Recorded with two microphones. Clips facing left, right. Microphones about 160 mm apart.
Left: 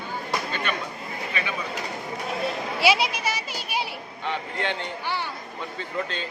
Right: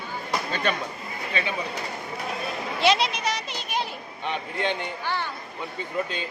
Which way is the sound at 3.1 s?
5° left (ahead or behind).